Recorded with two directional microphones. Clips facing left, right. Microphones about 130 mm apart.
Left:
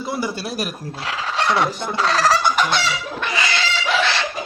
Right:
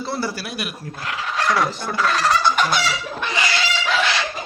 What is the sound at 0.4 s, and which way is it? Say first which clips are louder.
Speech: left 3 dB; 40° left (ahead or behind).